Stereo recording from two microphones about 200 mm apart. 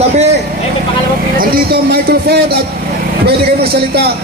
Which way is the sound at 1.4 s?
50° right (ahead or behind).